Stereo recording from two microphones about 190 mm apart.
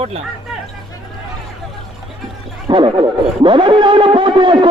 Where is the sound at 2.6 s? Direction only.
25° right (ahead or behind).